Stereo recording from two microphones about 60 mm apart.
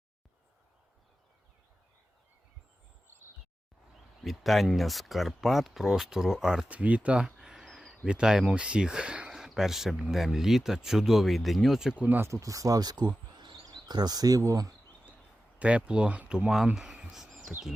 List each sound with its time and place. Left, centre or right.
4.2 s speech: centre
6.7 s speech: right
7.3 s a sound: centre
8.0 s speech: centre
9.6 s speech: centre
11.9 s speech: right
12.4 s speech: right
15.5 s speech: right
16.7 s speech: centre
17.1 s bird: centre